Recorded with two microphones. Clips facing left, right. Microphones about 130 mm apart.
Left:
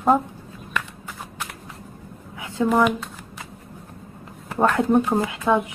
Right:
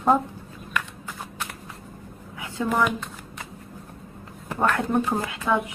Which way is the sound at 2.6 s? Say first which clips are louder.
Left 5 dB; 20° left (ahead or behind).